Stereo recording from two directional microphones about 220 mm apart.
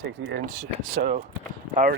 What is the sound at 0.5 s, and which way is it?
Speech, 35° right (ahead or behind).